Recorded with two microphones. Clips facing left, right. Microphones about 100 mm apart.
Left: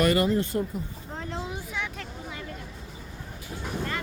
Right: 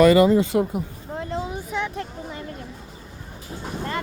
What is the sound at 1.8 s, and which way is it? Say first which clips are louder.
Vehicle: right 7 dB; 35° right (ahead or behind).